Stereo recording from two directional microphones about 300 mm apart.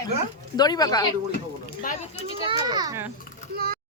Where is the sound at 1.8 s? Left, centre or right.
Left.